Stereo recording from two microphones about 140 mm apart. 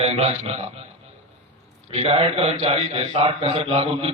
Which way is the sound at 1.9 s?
45° right (ahead or behind).